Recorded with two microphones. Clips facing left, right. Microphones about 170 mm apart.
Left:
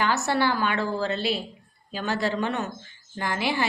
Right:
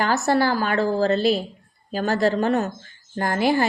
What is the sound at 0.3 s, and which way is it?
A woman's voice, 40° right (ahead or behind).